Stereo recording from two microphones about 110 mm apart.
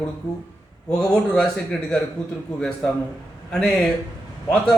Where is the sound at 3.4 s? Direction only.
5° left (ahead or behind).